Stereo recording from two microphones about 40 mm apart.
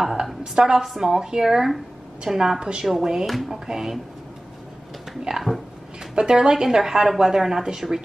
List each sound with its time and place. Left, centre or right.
0.4 s a woman's voice: centre
0.8 s a woman's voice: centre
3.5 s a woman's voice: centre
5.3 s a woman's voice: right; by 8.0 s centre